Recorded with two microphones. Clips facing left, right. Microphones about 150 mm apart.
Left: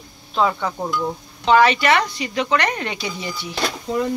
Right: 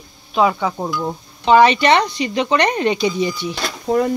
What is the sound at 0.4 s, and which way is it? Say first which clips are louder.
Speech: right 3 dB; 10° right (ahead or behind).